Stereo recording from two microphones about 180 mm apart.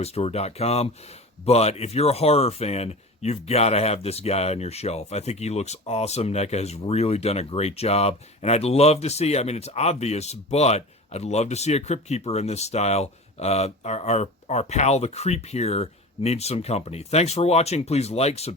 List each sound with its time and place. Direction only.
0.0 s speech: 35° left (ahead or behind)